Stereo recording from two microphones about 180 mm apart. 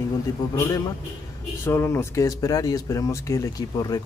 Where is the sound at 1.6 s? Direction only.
15° left (ahead or behind).